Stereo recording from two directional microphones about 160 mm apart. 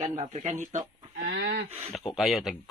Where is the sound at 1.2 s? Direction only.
90° right.